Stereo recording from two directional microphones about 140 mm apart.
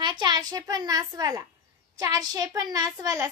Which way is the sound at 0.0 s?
35° right (ahead or behind).